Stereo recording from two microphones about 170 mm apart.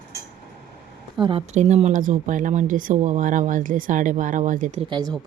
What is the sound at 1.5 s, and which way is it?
Speech, 40° right (ahead or behind).